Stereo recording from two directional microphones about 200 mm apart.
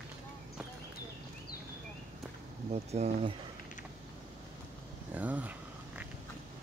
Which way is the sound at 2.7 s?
35° right (ahead or behind).